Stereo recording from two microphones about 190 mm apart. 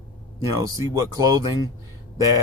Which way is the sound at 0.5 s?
15° right (ahead or behind).